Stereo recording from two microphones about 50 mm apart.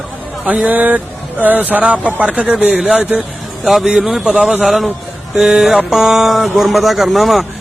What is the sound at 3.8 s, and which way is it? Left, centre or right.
A man's voice, centre.